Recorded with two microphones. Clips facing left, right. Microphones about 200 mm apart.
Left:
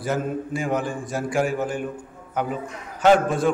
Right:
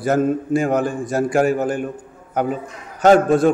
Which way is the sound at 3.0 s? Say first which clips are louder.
Right 5 dB; 40° right (ahead or behind).